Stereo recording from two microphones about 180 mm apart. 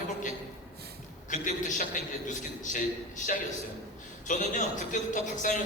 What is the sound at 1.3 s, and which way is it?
A man's voice, 45° left (ahead or behind).